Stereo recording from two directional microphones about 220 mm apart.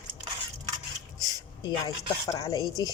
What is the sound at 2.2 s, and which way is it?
Speech, 15° left (ahead or behind).